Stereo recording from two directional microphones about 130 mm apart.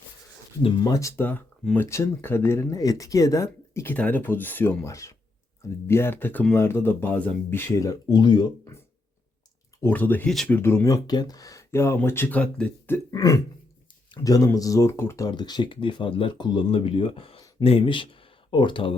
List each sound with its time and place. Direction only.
0.6 s speech: 35° left (ahead or behind)
9.8 s speech: 15° left (ahead or behind)
13.1 s speech: 25° left (ahead or behind); by 18.9 s 40° left (ahead or behind)